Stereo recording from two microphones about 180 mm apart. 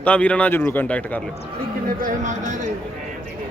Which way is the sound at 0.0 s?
10° left (ahead or behind).